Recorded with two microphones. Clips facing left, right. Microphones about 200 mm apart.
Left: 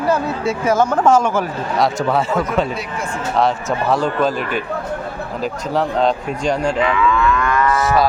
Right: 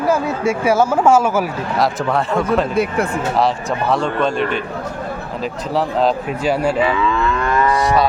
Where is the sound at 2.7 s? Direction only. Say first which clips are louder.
Right 8 dB; 55° right (ahead or behind).